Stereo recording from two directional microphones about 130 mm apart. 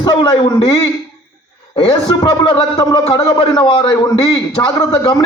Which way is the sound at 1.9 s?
30° left (ahead or behind).